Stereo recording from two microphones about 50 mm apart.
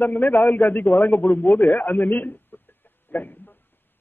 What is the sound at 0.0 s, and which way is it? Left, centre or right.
A man's voice, left.